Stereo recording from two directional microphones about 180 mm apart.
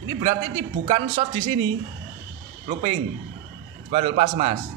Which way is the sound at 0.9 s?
30° right (ahead or behind).